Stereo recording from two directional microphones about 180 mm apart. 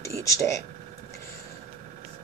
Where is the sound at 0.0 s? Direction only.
15° left (ahead or behind).